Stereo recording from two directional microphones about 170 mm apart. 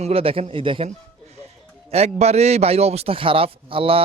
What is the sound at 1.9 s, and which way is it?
Speech, 40° right (ahead or behind).